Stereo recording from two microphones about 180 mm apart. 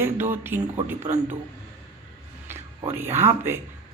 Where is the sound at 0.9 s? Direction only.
40° right (ahead or behind).